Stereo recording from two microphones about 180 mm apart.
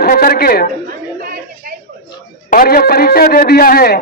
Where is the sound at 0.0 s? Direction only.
55° left (ahead or behind).